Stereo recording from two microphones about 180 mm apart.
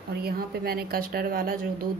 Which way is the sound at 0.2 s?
60° right (ahead or behind).